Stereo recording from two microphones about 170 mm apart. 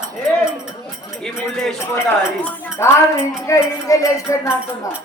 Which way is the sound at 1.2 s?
5° left (ahead or behind).